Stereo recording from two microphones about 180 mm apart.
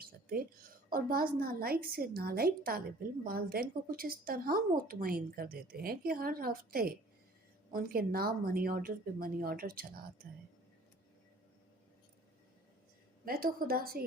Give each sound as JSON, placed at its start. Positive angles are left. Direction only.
{"t": 0.0, "sound": "a woman's voice", "side_deg": -55}
{"t": 13.2, "sound": "a woman's voice", "side_deg": -55}